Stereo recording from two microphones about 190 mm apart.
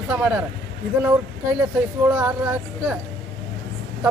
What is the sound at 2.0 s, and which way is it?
Speech, 10° right (ahead or behind).